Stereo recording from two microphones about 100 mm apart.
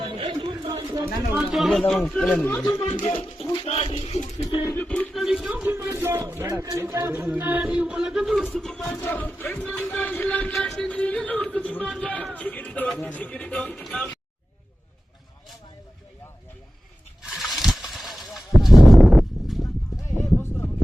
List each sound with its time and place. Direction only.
0.2 s a sound: 60° right (ahead or behind)
0.9 s speech: 30° right (ahead or behind)
1.4 s a man's voice: centre (ahead or behind)
2.3 s music: 20° left (ahead or behind)
2.7 s speech: 70° left (ahead or behind)
5.1 s speech: 5° right (ahead or behind)
5.6 s speech: 25° right (ahead or behind)
7.1 s a man's voice: 20° right (ahead or behind); by 9.0 s 5° left (ahead or behind)
9.0 s music: 20° left (ahead or behind)
12.3 s speech: 15° left (ahead or behind)
13.1 s music: 15° left (ahead or behind)
13.8 s a man's voice: centre (ahead or behind)
17.2 s a sound: centre (ahead or behind)
20.0 s a sound: 25° left (ahead or behind)